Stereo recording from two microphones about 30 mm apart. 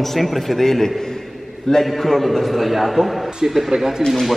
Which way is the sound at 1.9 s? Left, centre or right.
Centre.